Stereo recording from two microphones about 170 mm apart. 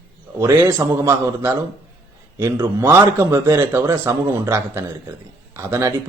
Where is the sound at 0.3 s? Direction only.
15° right (ahead or behind).